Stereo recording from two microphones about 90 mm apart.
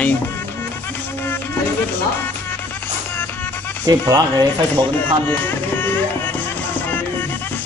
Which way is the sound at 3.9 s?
45° right (ahead or behind).